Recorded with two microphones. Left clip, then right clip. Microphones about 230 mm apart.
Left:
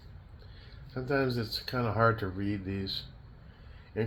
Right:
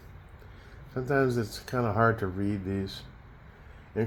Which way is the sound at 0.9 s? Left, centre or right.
Right.